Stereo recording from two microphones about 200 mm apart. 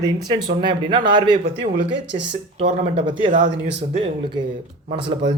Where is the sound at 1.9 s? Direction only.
60° right (ahead or behind).